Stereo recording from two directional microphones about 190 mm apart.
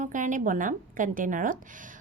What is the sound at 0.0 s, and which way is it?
A woman's voice, 45° right (ahead or behind).